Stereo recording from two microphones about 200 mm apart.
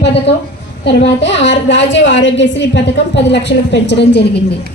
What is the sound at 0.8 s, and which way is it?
A woman's voice, 60° left (ahead or behind).